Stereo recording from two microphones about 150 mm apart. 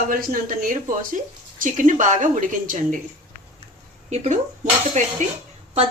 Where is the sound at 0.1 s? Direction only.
65° right (ahead or behind).